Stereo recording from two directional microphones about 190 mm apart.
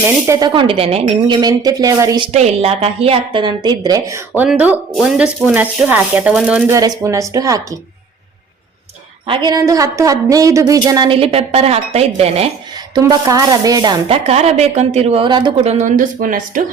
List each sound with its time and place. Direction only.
0.0 s speech: 20° right (ahead or behind)
6.7 s speech: 15° right (ahead or behind)
9.2 s speech: 25° right (ahead or behind)
12.9 s speech: 20° right (ahead or behind)
14.3 s a woman's voice: 35° right (ahead or behind)